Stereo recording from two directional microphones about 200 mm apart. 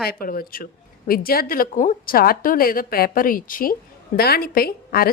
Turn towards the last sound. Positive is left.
turn(degrees=50)  # may be behind; listen again after turning